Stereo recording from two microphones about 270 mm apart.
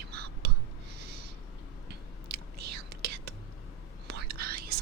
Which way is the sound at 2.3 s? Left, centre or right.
Right.